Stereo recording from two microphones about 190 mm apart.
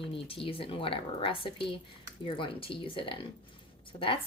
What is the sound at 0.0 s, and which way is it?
Speech, 30° left (ahead or behind).